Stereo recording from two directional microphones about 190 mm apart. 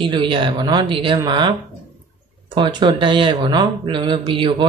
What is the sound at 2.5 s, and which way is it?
Speech, 25° right (ahead or behind).